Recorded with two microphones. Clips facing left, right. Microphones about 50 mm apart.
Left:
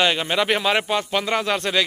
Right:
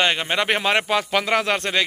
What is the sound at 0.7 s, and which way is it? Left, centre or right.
Speech, right.